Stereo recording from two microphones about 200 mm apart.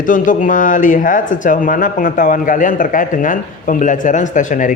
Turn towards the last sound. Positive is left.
turn(degrees=40)  # may be behind; listen again after turning